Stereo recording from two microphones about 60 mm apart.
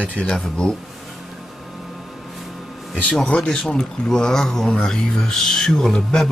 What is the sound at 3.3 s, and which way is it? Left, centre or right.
Speech, centre.